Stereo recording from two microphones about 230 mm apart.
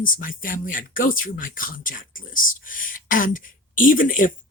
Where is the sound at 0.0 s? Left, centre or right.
Left.